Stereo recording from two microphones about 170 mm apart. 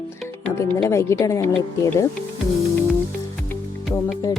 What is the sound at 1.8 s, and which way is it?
Music, 20° left (ahead or behind).